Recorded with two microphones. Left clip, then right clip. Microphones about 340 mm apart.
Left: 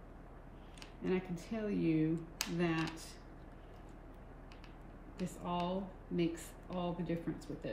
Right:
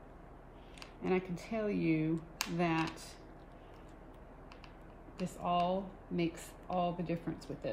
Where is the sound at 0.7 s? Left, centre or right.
Centre.